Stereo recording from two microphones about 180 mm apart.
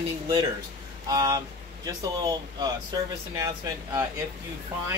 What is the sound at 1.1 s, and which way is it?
Speech, 25° right (ahead or behind).